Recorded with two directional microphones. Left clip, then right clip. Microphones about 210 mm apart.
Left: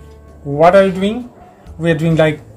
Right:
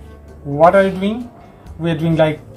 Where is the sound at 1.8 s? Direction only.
30° left (ahead or behind).